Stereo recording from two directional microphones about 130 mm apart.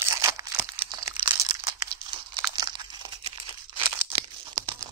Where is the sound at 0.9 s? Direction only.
35° right (ahead or behind).